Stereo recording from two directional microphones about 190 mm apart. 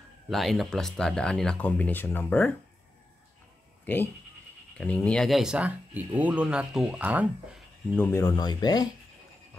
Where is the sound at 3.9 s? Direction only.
10° left (ahead or behind); by 7.6 s 10° right (ahead or behind).